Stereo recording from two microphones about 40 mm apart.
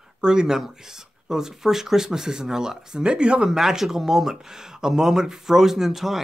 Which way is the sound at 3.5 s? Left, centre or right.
Centre.